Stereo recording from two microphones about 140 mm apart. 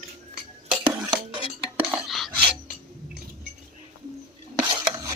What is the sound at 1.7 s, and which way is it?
Dishes, 15° right (ahead or behind).